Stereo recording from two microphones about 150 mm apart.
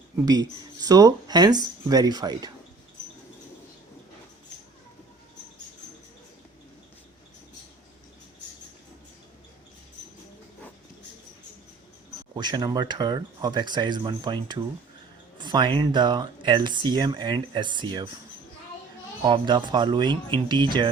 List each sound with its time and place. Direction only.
0.3 s speech: 25° right (ahead or behind)
12.3 s speech: 30° right (ahead or behind)
19.2 s speech: 30° right (ahead or behind)